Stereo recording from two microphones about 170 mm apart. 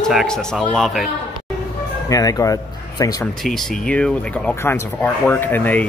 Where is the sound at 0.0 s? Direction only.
Centre (ahead or behind).